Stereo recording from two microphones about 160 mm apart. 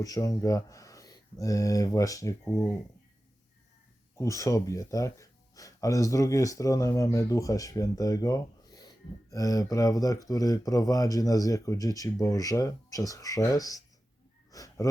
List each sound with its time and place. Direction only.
0.0 s speech: 20° left (ahead or behind)
4.2 s speech: 20° left (ahead or behind)
14.5 s a sound: 20° left (ahead or behind)